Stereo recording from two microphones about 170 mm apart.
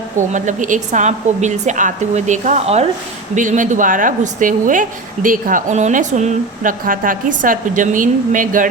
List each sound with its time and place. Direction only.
0.2 s a woman's voice: 45° right (ahead or behind)